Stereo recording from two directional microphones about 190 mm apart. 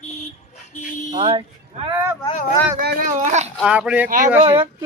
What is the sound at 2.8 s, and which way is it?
Speech, 55° right (ahead or behind).